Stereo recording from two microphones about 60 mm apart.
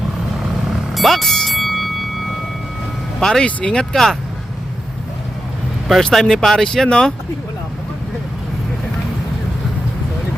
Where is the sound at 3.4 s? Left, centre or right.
Centre.